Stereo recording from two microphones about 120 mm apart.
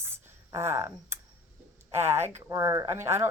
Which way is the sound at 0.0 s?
20° right (ahead or behind).